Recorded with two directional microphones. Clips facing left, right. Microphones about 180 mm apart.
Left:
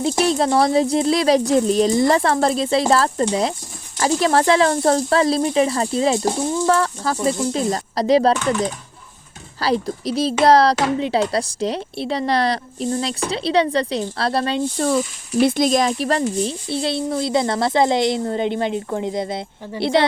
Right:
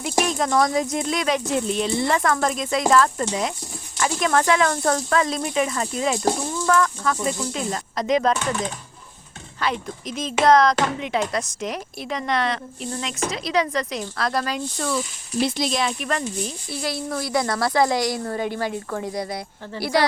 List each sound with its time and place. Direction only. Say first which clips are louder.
0.0 s speech: left 5 dB; 30° left (ahead or behind)
14.8 s speech: left 6 dB; 55° left (ahead or behind); by 20.1 s 25° left (ahead or behind)